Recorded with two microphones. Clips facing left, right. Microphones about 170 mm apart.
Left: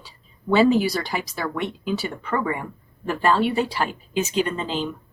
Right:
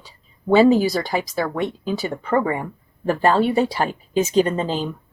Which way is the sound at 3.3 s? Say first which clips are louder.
Right 3 dB; 50° right (ahead or behind).